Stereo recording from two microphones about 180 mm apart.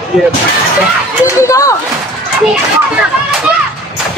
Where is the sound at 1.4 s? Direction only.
15° left (ahead or behind).